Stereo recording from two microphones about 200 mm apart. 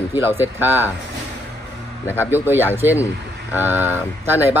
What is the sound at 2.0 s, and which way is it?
Speech, 10° left (ahead or behind).